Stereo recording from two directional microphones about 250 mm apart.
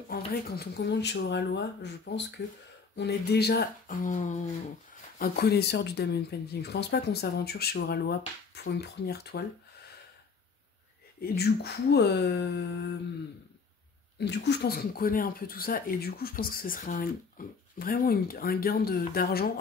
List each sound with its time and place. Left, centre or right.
0.3 s speech: left
5.2 s speech: left
11.1 s speech: left
14.1 s speech: left